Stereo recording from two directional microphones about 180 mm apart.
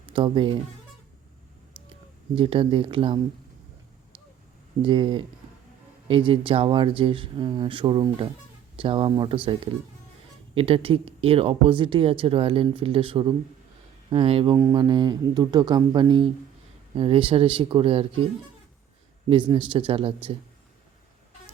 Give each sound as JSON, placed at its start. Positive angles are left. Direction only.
{"t": 0.0, "sound": "speech", "side_deg": -30}
{"t": 2.3, "sound": "speech", "side_deg": -30}
{"t": 4.9, "sound": "speech", "side_deg": -25}
{"t": 14.5, "sound": "speech", "side_deg": -20}
{"t": 19.3, "sound": "speech", "side_deg": -30}